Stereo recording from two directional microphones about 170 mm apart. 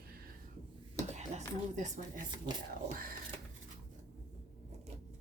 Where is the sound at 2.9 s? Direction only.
55° right (ahead or behind).